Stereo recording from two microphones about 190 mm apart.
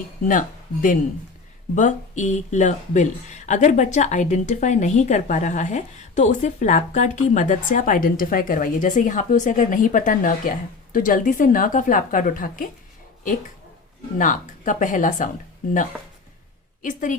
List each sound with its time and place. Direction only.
0.3 s a woman's voice: 45° left (ahead or behind)
14.2 s a woman's voice: 45° left (ahead or behind)
16.8 s a woman's voice: 45° left (ahead or behind)